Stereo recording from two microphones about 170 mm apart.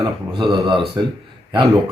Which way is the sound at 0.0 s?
30° right (ahead or behind).